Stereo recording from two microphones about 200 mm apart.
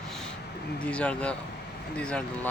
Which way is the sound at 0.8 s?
5° left (ahead or behind).